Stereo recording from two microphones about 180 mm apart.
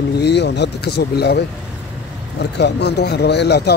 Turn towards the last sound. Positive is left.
turn(degrees=65)  # may be behind; listen again after turning